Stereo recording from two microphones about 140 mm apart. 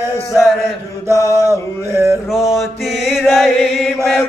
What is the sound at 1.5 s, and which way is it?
Male singing, 20° right (ahead or behind).